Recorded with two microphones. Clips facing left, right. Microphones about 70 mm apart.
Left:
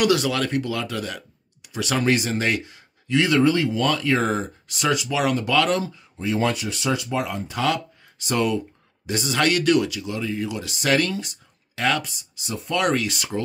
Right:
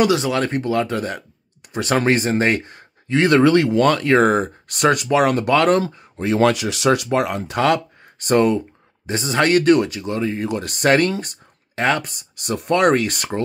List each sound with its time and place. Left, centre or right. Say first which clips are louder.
0.0 s speech: right 3 dB; right
9.0 s speech: right 3 dB; right
12.1 s speech: right 7 dB; right